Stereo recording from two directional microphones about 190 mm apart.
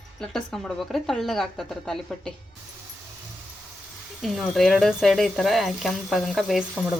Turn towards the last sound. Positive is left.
turn(degrees=-5)  # may be behind; listen again after turning